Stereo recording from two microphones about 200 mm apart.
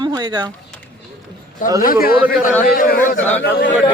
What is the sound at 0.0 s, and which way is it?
Speech, 20° right (ahead or behind).